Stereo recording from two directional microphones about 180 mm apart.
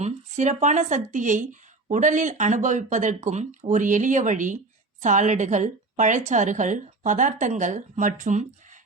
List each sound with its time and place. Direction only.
0.0 s a woman's voice: 40° right (ahead or behind)